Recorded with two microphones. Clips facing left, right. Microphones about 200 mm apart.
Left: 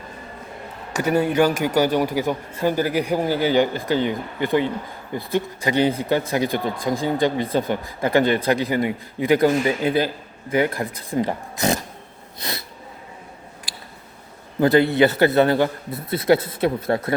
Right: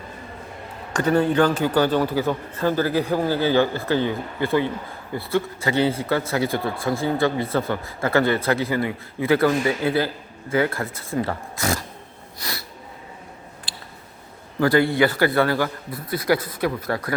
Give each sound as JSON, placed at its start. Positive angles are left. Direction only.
{"t": 0.9, "sound": "speech", "side_deg": 10}
{"t": 12.4, "sound": "snort", "side_deg": 20}
{"t": 14.6, "sound": "a man's voice", "side_deg": 20}